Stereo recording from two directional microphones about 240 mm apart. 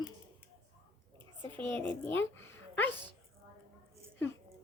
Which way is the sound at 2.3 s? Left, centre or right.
Left.